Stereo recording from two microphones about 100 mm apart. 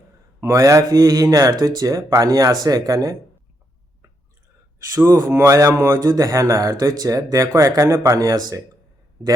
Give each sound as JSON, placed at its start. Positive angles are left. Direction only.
{"t": 0.3, "sound": "speech", "side_deg": -30}
{"t": 5.2, "sound": "speech", "side_deg": -25}